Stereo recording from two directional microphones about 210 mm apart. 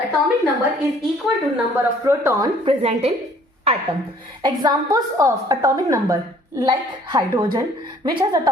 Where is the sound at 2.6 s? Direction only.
30° right (ahead or behind).